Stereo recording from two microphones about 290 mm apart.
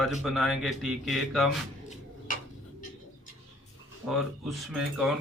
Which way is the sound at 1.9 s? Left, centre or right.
Left.